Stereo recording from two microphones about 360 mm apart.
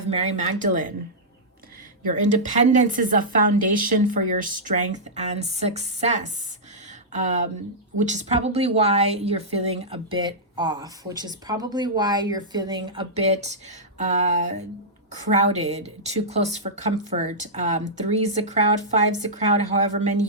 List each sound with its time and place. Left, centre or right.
0.1 s a woman's voice: centre
2.3 s a woman's voice: right
15.3 s a woman's voice: centre